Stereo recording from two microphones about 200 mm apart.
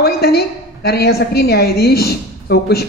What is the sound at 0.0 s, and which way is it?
A woman's voice, 50° left (ahead or behind).